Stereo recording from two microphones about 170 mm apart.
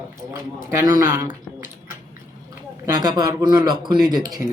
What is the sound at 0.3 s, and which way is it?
Speech, 15° right (ahead or behind).